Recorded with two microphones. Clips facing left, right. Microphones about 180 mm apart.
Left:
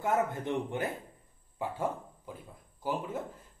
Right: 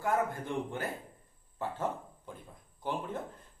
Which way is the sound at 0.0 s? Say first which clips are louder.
Left 2 dB; 20° left (ahead or behind).